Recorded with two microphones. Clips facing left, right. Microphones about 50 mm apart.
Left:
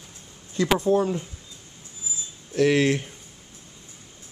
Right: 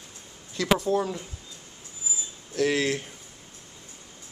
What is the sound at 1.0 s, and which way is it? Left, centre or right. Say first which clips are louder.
Speech: left 5 dB; centre.